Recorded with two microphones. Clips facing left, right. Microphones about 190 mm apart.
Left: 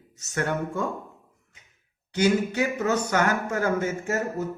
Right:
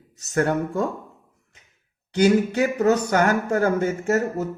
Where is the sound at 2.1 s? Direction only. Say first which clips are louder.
Right 4 dB; 35° right (ahead or behind).